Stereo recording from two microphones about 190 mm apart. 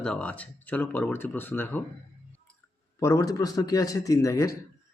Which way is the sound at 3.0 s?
15° left (ahead or behind).